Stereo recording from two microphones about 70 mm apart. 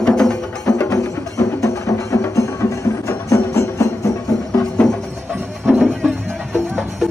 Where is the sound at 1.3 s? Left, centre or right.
Left.